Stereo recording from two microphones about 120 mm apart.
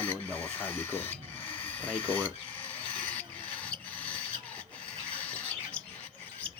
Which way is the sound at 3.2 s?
10° left (ahead or behind).